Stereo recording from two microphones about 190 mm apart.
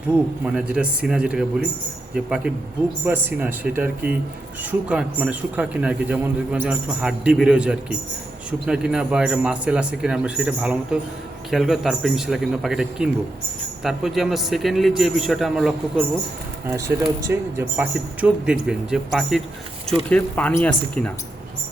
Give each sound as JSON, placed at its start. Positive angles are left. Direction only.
{"t": 0.4, "sound": "a man's voice", "side_deg": -5}
{"t": 16.6, "sound": "a man's voice", "side_deg": -15}